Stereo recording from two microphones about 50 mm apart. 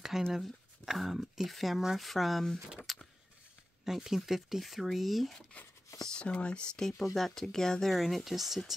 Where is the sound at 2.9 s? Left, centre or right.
Centre.